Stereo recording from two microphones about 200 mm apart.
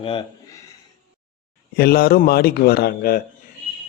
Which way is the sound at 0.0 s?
25° left (ahead or behind).